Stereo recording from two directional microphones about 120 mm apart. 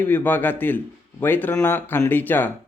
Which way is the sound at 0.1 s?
15° left (ahead or behind).